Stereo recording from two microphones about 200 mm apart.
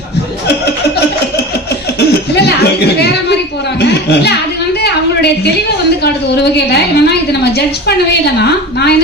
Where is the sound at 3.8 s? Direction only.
55° left (ahead or behind).